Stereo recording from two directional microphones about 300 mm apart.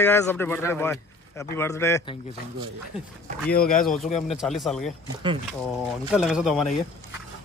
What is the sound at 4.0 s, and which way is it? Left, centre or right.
Speech, centre.